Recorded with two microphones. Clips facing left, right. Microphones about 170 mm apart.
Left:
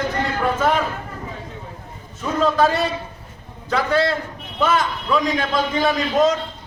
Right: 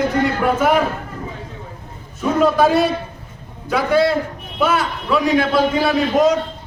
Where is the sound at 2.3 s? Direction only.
10° right (ahead or behind).